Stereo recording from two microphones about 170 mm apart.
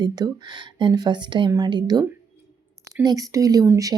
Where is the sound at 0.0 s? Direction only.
25° right (ahead or behind).